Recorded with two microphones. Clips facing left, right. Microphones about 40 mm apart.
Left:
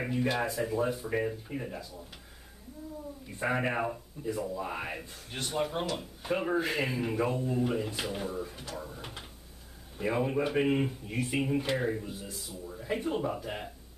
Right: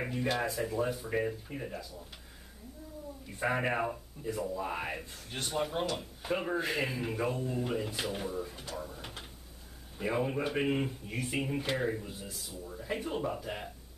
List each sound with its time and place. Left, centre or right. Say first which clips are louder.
0.0 s speech: left 2 dB; centre
3.3 s speech: left 1 dB; centre